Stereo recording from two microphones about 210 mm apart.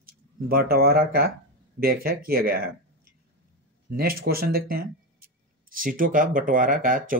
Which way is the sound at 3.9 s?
45° right (ahead or behind).